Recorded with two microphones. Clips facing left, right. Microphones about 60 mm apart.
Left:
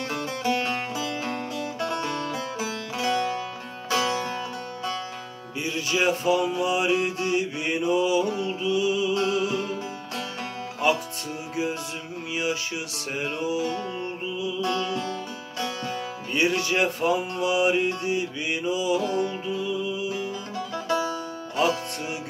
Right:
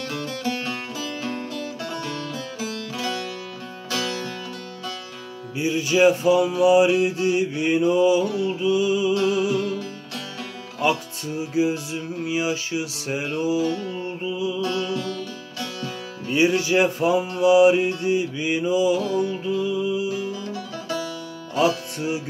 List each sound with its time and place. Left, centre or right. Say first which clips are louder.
0.1 s music: left 2 dB; left
5.6 s music: right 7 dB; centre
10.8 s music: right 1 dB; centre
14.6 s music: right 1 dB; left
16.3 s music: right 5 dB; centre
20.7 s music: left 5 dB; left
21.5 s music: right 3 dB; centre